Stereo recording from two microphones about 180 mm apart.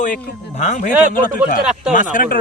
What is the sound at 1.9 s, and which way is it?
Speech, 45° left (ahead or behind).